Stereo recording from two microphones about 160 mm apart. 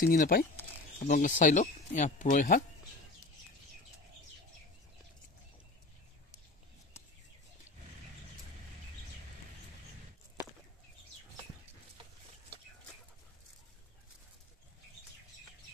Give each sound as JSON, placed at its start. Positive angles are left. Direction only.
{"t": 0.0, "sound": "speech", "side_deg": 60}